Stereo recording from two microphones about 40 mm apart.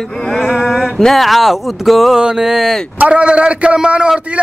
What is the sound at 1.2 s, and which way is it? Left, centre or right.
Speech, centre.